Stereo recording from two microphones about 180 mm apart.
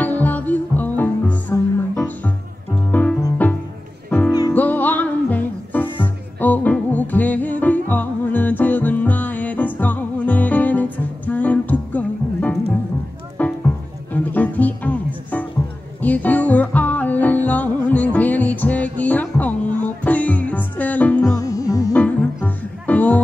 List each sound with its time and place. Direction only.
0.2 s music: 10° left (ahead or behind)
4.3 s music: 20° left (ahead or behind)
4.6 s music: 10° left (ahead or behind)
16.0 s music: 10° left (ahead or behind)
21.5 s music: 20° left (ahead or behind)
21.9 s music: 10° left (ahead or behind)